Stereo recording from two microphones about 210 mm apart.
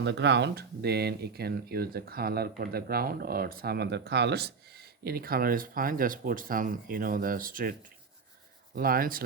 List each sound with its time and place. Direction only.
0.0 s speech: 55° right (ahead or behind)